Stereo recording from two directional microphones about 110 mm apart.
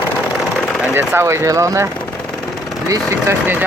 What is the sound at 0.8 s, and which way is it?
Speech, 20° right (ahead or behind).